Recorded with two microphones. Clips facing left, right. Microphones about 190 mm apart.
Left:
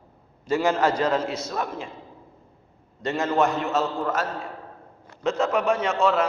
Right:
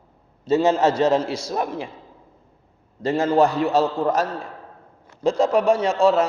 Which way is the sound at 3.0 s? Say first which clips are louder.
Right 5 dB; 30° right (ahead or behind).